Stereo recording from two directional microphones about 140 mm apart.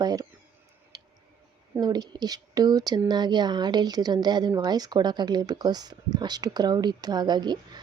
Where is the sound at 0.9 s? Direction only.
30° right (ahead or behind).